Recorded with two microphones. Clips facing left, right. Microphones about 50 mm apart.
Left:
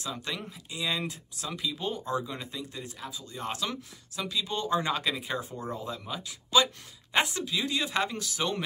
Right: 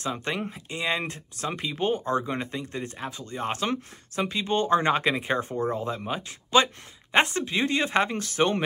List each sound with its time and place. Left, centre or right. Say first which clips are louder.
0.0 s speech: right 6 dB; right